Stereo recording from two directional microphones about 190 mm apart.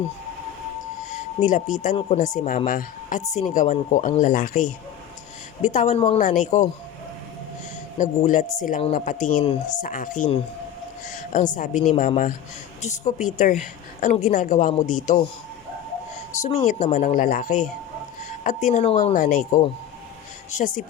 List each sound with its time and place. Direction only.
1.4 s a woman's voice: 40° left (ahead or behind)
7.9 s a woman's voice: 40° left (ahead or behind)
16.4 s a woman's voice: 40° left (ahead or behind)
19.1 s speech: 45° left (ahead or behind)